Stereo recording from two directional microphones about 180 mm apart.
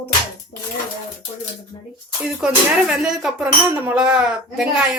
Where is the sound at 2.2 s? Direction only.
5° right (ahead or behind).